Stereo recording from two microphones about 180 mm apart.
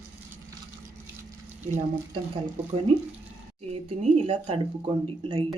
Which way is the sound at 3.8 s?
30° right (ahead or behind).